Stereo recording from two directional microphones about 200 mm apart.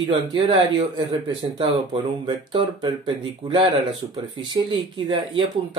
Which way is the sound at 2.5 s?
25° right (ahead or behind).